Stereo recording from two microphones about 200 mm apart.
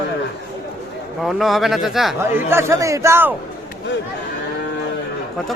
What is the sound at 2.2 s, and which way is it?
A man's voice, 10° right (ahead or behind).